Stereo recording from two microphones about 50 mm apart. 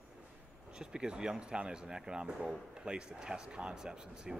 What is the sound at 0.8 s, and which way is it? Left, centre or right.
Speech, centre.